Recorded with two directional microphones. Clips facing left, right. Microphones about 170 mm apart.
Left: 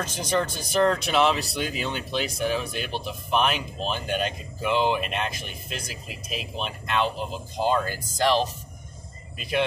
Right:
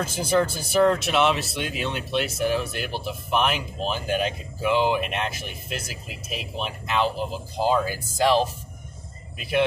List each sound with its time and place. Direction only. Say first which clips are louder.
0.0 s speech: right 4 dB; 5° right (ahead or behind)